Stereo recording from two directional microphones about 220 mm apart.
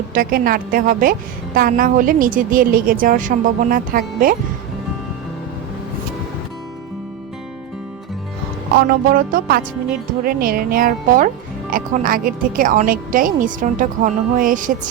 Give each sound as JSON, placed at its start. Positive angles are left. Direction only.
{"t": 0.1, "sound": "a woman's voice", "side_deg": -40}
{"t": 8.9, "sound": "a woman's voice", "side_deg": -40}